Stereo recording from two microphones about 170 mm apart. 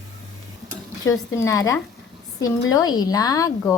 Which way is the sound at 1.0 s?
20° left (ahead or behind).